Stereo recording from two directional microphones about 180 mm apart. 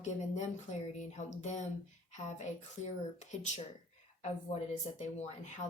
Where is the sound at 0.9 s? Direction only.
40° left (ahead or behind).